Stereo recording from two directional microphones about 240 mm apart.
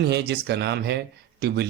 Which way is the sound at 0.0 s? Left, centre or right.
Right.